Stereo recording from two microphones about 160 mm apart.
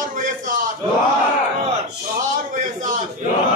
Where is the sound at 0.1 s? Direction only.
55° right (ahead or behind).